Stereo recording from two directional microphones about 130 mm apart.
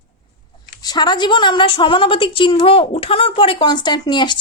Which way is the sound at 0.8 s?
30° left (ahead or behind).